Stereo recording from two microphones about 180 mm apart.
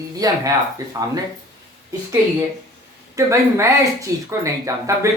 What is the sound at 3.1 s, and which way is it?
Speech, 15° right (ahead or behind).